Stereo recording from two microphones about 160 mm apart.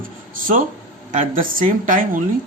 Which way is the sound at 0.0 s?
60° right (ahead or behind).